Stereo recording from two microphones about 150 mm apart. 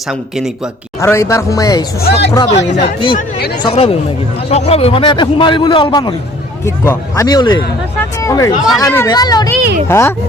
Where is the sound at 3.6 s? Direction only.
40° left (ahead or behind).